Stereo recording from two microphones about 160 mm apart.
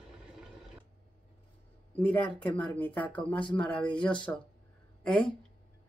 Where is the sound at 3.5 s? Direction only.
5° left (ahead or behind).